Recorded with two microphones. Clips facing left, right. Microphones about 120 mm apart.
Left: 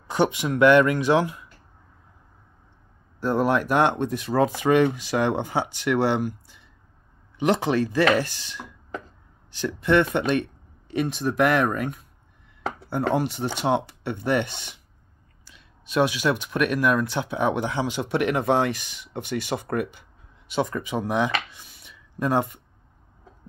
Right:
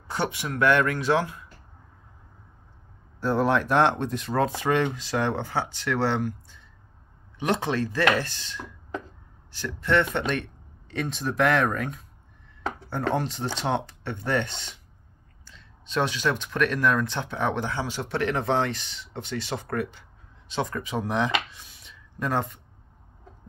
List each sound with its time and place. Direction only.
0.1 s speech: 20° left (ahead or behind)
3.2 s speech: 5° left (ahead or behind)
21.5 s a sound: centre (ahead or behind)